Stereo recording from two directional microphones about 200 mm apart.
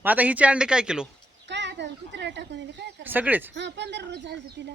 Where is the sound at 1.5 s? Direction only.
60° right (ahead or behind).